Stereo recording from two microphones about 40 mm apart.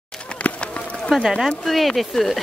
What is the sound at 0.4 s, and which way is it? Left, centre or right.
Run, left.